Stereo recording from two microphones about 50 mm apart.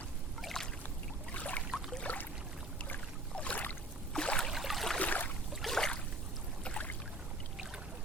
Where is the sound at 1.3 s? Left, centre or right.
Left.